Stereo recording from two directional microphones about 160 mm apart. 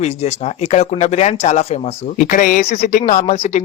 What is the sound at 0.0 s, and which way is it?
Speech, 40° left (ahead or behind).